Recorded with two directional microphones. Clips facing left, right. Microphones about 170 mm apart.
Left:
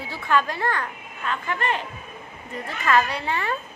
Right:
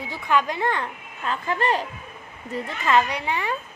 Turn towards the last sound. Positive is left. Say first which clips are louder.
# even
turn(degrees=-15)  # may be behind; listen again after turning